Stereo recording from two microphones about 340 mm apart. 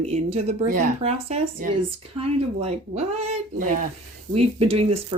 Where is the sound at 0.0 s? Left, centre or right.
Centre.